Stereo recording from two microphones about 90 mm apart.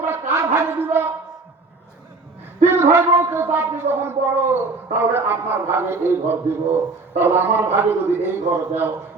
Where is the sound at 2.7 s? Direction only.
30° right (ahead or behind).